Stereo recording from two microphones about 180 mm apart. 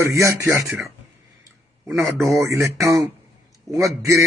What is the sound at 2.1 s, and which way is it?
Speech, centre (ahead or behind).